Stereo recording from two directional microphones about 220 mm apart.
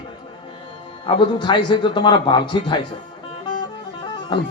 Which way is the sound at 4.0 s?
20° left (ahead or behind).